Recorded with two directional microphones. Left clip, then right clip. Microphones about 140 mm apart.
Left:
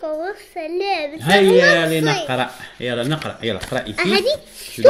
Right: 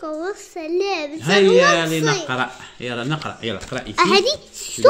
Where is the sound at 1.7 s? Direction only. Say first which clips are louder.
Left 2 dB; 55° left (ahead or behind).